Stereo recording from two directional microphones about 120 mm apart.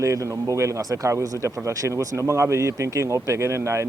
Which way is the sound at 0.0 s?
25° right (ahead or behind).